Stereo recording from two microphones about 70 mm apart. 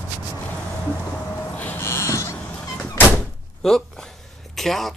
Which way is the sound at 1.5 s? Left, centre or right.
Left.